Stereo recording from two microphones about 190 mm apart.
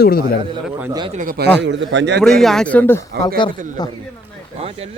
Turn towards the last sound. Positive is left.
turn(degrees=-30)  # may be behind; listen again after turning